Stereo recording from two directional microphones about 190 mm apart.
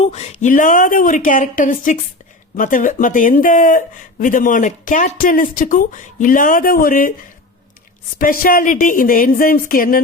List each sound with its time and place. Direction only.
0.0 s speech: 35° left (ahead or behind)
8.2 s speech: 50° left (ahead or behind)